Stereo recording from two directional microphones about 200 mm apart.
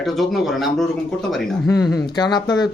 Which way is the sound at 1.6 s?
15° left (ahead or behind).